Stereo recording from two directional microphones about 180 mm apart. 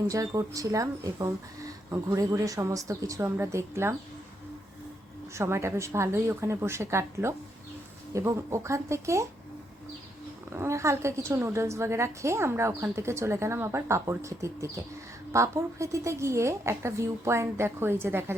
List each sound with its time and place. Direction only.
0.1 s a woman's voice: 20° right (ahead or behind)
5.3 s a woman's voice: 15° right (ahead or behind)
10.5 s a woman's voice: 15° right (ahead or behind)